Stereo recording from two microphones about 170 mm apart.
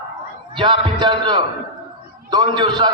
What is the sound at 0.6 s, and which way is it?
A man's voice, 30° right (ahead or behind).